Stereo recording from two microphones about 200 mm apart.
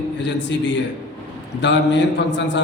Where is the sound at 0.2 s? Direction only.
65° left (ahead or behind).